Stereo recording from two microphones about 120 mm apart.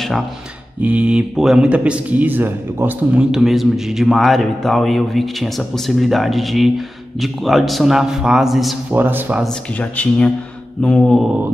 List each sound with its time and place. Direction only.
0.8 s a man's voice: 10° right (ahead or behind)
8.9 s speech: 15° right (ahead or behind)
9.4 s speech: 10° left (ahead or behind)